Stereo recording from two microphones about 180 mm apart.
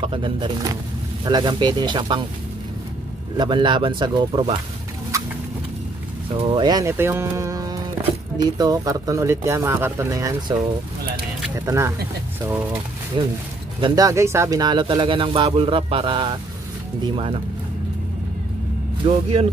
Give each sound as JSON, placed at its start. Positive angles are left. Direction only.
{"t": 0.0, "sound": "speech", "side_deg": -30}
{"t": 3.3, "sound": "speech", "side_deg": -25}
{"t": 6.3, "sound": "speech", "side_deg": -30}
{"t": 13.2, "sound": "speech", "side_deg": -25}
{"t": 19.0, "sound": "speech", "side_deg": -35}